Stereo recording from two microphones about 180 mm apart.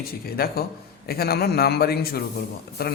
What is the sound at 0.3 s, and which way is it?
Speech, 55° left (ahead or behind).